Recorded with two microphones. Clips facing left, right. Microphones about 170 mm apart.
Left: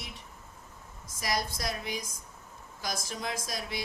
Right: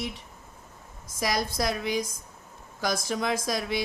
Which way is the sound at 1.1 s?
90° right.